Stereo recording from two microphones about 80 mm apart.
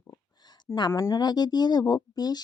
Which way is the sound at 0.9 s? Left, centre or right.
Left.